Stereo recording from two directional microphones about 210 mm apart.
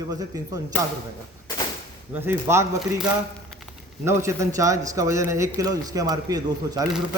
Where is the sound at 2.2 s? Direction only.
10° right (ahead or behind).